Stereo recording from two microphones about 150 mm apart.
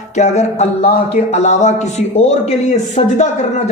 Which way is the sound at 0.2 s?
50° left (ahead or behind).